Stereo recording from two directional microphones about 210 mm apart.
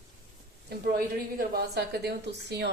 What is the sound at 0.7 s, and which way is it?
Speech, 45° right (ahead or behind).